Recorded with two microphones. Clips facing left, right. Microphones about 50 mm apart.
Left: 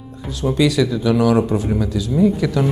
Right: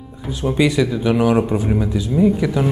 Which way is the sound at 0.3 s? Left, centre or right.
Right.